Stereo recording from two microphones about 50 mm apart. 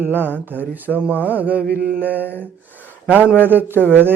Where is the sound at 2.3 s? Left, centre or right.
Left.